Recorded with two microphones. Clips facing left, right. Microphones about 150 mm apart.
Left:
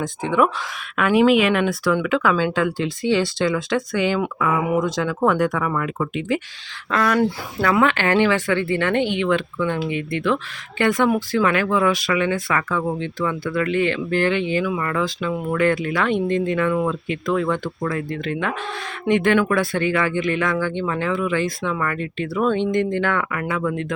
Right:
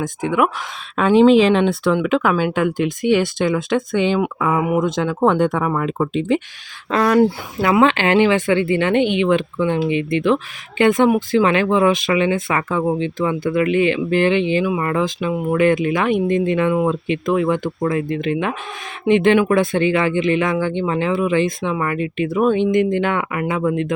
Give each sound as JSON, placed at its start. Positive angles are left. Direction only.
{"t": 0.0, "sound": "speech", "side_deg": -15}
{"t": 0.9, "sound": "speech", "side_deg": -30}